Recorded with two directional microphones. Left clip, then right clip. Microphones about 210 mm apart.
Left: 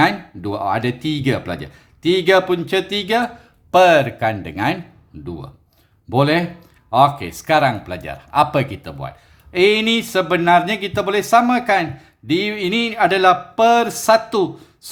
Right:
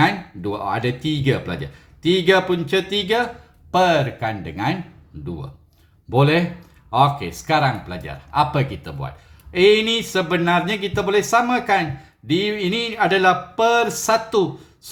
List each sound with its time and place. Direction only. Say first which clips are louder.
0.0 s speech: left 2 dB; 35° left (ahead or behind)
6.1 s speech: left 1 dB; 35° left (ahead or behind)